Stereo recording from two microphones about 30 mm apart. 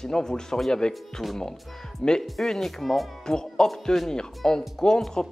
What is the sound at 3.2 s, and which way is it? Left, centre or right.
Music, left.